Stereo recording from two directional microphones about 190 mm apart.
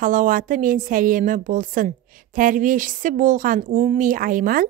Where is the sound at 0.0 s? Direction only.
45° right (ahead or behind).